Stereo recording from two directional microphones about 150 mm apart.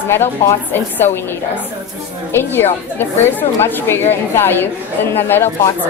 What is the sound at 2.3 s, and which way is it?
A woman's voice, 15° left (ahead or behind).